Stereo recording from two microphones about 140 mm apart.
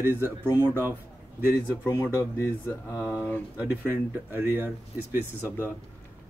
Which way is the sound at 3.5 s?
10° right (ahead or behind).